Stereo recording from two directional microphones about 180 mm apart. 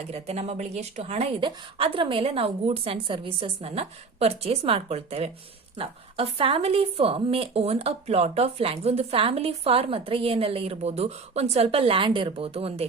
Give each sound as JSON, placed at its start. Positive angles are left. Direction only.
{"t": 0.1, "sound": "a woman's voice", "side_deg": -35}